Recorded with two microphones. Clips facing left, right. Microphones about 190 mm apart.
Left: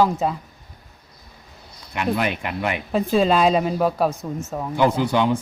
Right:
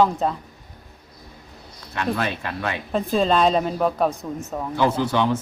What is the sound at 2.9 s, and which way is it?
Speech, 5° left (ahead or behind).